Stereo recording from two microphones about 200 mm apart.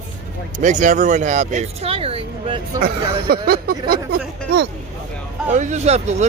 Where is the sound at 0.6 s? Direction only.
40° right (ahead or behind).